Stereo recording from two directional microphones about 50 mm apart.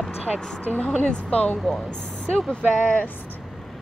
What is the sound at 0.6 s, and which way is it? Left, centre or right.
A woman's voice, left.